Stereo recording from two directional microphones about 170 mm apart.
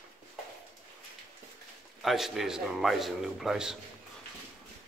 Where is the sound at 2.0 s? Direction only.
Centre (ahead or behind).